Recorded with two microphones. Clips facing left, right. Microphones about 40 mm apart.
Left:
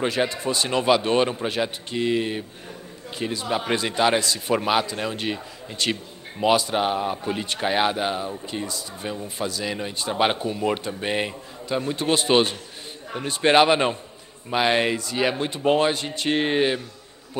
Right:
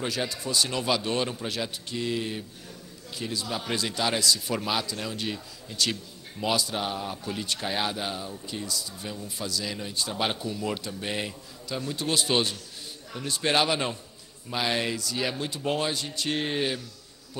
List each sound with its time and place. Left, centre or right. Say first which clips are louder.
0.0 s a man's voice: left 7 dB; left